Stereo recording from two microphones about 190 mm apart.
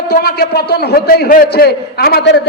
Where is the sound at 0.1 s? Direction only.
55° left (ahead or behind).